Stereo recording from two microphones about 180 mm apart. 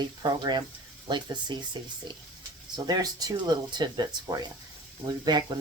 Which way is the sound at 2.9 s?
20° right (ahead or behind).